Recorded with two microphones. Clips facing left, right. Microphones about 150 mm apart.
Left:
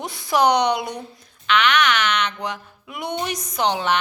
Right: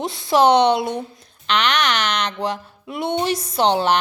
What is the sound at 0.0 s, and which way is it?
A woman's voice, 25° right (ahead or behind).